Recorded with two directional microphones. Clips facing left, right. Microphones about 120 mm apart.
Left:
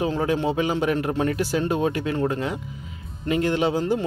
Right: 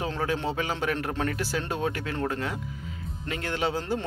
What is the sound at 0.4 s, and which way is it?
A man's voice, 15° left (ahead or behind).